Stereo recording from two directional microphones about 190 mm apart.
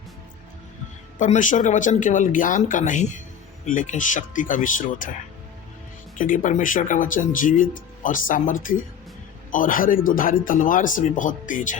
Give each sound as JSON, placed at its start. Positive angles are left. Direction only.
{"t": 1.2, "sound": "speech", "side_deg": 40}
{"t": 6.1, "sound": "speech", "side_deg": 45}